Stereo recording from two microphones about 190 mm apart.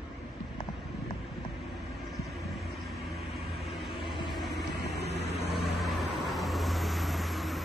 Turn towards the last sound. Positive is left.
turn(degrees=0)  # may be behind; listen again after turning